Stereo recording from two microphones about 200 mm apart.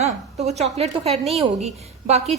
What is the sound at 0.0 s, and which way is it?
A woman's voice, 30° right (ahead or behind).